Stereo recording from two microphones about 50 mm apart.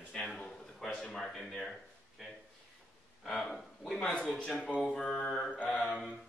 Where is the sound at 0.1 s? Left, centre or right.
Centre.